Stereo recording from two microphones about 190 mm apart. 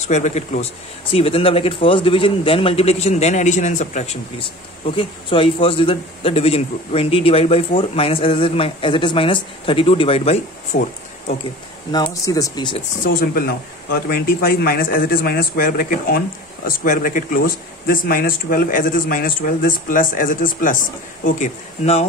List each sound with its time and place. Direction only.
0.0 s a man's voice: 35° left (ahead or behind)
11.9 s a man's voice: 20° left (ahead or behind)
13.0 s speech: 50° left (ahead or behind)